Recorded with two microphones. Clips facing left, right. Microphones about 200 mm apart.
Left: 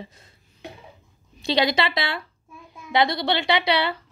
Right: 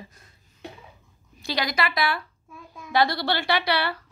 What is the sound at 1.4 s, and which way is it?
Speech, 25° left (ahead or behind).